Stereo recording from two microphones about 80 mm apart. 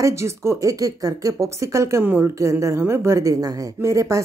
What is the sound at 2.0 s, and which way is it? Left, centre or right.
Speech, right.